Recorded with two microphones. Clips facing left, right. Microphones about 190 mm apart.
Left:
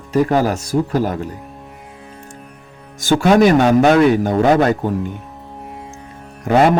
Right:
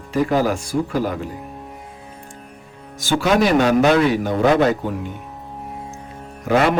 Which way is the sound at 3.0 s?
50° left (ahead or behind).